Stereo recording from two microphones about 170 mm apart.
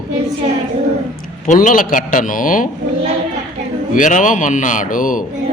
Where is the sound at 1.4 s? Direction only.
50° left (ahead or behind).